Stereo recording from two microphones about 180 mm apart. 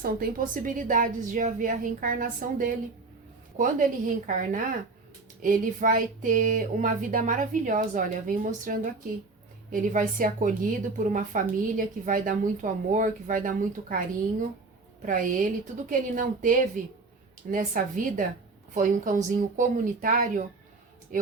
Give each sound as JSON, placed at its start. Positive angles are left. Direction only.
{"t": 0.0, "sound": "a woman's voice", "side_deg": -55}
{"t": 15.0, "sound": "a woman's voice", "side_deg": -50}